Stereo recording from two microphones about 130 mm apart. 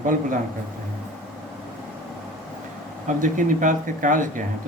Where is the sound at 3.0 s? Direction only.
85° right.